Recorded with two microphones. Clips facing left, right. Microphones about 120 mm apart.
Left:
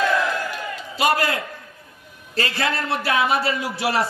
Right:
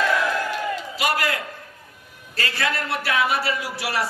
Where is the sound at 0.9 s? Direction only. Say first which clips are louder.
Left 6 dB; 25° left (ahead or behind).